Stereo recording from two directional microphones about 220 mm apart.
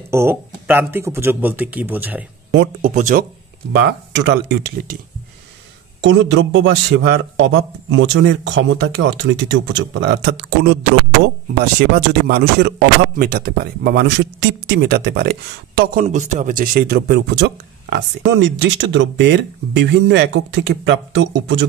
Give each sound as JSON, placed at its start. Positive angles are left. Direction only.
{"t": 0.1, "sound": "speech", "side_deg": -10}
{"t": 2.8, "sound": "speech", "side_deg": -35}
{"t": 3.8, "sound": "a man's voice", "side_deg": -50}
{"t": 5.9, "sound": "a man's voice", "side_deg": -55}